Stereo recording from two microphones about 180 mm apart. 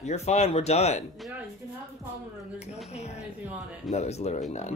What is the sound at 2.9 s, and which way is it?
Speech, 35° left (ahead or behind).